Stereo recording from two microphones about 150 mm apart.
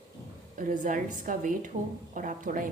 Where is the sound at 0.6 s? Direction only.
60° right (ahead or behind).